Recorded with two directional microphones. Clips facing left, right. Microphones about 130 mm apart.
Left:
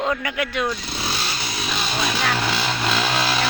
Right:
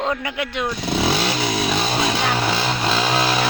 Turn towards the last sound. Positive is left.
turn(degrees=-20)  # may be behind; listen again after turning